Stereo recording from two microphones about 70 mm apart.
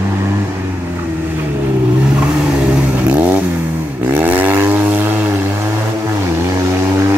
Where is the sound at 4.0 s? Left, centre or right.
Right.